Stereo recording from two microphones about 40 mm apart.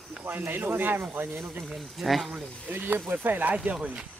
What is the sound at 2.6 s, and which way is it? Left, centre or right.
Speech, right.